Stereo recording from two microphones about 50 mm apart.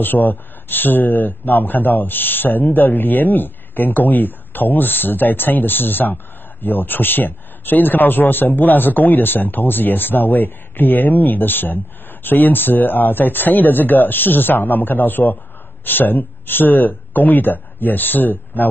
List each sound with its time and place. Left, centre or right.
0.0 s a man's voice: left